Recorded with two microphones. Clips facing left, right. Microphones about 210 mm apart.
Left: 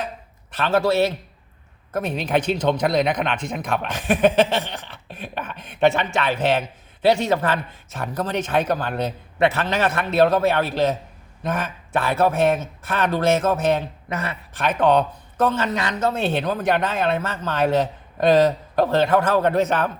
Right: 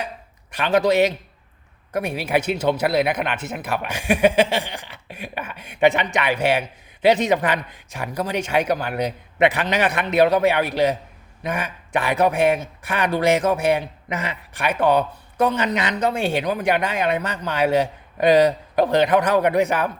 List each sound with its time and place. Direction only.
0.5 s speech: 15° right (ahead or behind)